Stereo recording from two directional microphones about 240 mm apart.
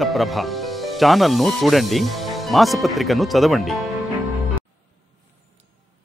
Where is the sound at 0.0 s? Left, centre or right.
Centre.